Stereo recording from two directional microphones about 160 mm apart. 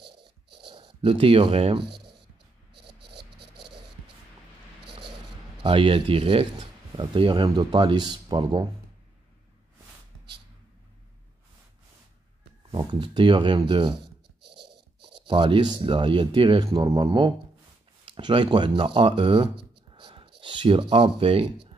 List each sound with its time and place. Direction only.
0.0 s dog: 90° right
0.7 s speech: 30° right (ahead or behind)
1.9 s a sound: 90° right
5.6 s speech: 35° right (ahead or behind)
12.7 s speech: 30° right (ahead or behind)
14.4 s a sound: 90° right
15.1 s speech: 30° right (ahead or behind)
19.9 s a sound: 35° right (ahead or behind)
20.9 s speech: 35° right (ahead or behind)